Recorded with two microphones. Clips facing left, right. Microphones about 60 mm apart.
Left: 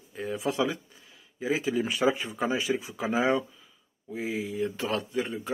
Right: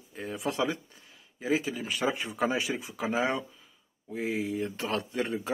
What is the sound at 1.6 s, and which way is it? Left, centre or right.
Speech, left.